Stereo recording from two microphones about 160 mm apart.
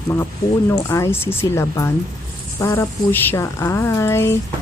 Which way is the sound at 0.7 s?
15° left (ahead or behind).